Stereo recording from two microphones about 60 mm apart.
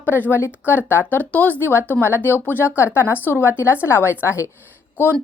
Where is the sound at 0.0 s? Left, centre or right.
Left.